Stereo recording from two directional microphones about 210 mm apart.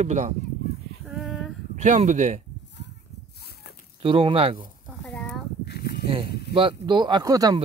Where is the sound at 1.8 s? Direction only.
35° right (ahead or behind).